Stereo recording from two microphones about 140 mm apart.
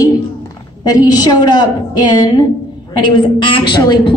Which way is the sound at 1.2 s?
30° left (ahead or behind).